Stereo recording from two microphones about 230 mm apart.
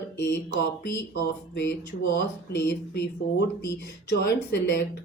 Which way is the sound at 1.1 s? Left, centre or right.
Left.